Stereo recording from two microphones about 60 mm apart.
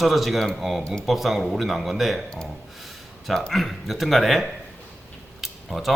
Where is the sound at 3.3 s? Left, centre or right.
Centre.